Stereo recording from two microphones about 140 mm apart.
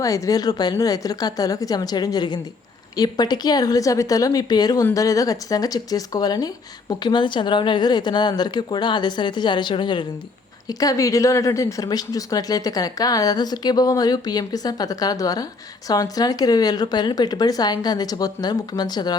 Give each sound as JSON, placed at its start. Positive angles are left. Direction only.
{"t": 0.0, "sound": "speech", "side_deg": 25}